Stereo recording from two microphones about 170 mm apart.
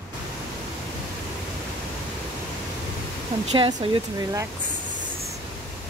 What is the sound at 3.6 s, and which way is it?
Speech, 30° right (ahead or behind).